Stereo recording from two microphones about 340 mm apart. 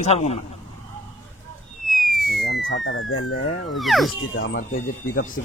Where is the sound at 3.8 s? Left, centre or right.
Centre.